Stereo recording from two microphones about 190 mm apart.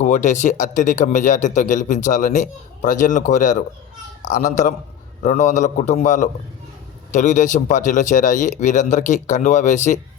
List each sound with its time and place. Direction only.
0.0 s speech: 40° left (ahead or behind)